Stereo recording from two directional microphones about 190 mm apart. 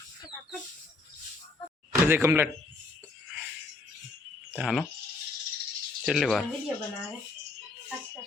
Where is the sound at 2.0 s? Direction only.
10° right (ahead or behind).